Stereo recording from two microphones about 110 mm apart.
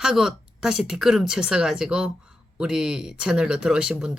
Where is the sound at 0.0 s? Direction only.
5° right (ahead or behind).